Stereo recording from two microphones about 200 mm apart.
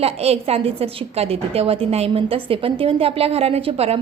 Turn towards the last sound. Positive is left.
turn(degrees=-30)  # may be behind; listen again after turning